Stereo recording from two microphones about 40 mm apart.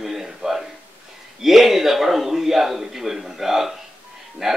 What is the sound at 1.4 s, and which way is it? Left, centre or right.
A man's voice, centre.